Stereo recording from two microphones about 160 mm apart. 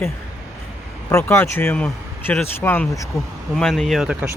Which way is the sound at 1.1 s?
15° left (ahead or behind).